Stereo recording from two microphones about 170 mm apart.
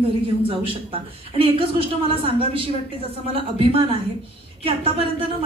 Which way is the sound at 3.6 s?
35° right (ahead or behind).